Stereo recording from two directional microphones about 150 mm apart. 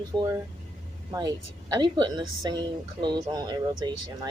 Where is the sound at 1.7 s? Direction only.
30° right (ahead or behind).